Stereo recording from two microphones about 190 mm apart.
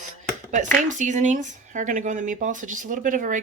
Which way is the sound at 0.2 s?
40° right (ahead or behind).